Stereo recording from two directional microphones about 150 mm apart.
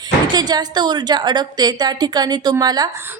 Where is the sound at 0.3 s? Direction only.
25° right (ahead or behind).